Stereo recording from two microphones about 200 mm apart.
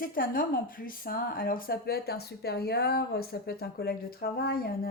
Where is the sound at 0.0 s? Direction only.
45° left (ahead or behind).